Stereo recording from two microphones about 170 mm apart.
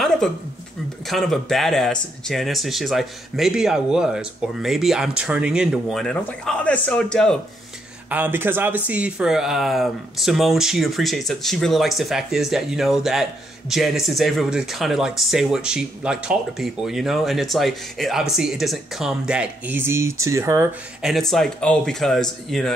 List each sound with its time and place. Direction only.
1.0 s speech: centre (ahead or behind)
8.1 s speech: 10° right (ahead or behind)
21.0 s speech: centre (ahead or behind)